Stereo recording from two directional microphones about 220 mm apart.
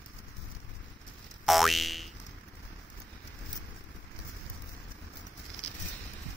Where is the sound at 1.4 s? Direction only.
Centre (ahead or behind).